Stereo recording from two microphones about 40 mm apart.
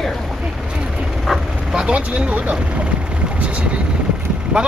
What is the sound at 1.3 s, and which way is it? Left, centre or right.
Speech, centre.